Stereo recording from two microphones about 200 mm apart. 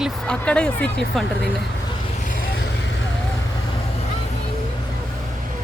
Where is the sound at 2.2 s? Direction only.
40° left (ahead or behind).